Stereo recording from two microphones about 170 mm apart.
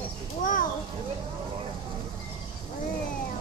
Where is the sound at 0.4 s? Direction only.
50° left (ahead or behind).